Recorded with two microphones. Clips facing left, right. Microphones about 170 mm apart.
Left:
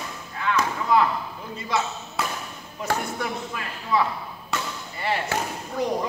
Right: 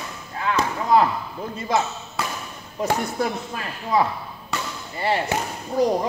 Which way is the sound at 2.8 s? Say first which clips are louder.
Right 4 dB; 40° right (ahead or behind).